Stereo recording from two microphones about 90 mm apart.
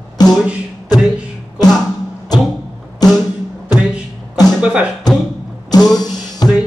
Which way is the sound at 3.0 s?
50° left (ahead or behind).